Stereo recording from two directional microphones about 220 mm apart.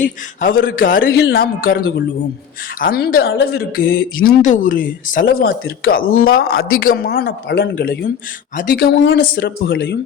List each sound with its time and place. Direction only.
0.0 s a man's voice: 40° left (ahead or behind)